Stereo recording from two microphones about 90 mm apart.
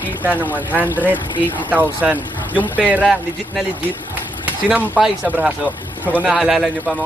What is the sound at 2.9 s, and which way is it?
Speech, 15° right (ahead or behind).